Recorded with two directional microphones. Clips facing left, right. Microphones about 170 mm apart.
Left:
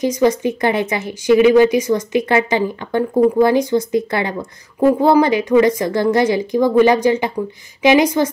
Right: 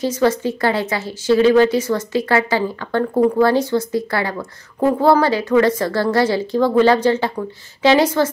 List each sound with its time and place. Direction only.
0.0 s a woman's voice: 15° left (ahead or behind)